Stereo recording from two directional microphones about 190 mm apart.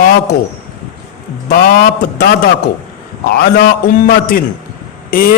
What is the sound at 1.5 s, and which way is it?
A man's voice, 50° left (ahead or behind).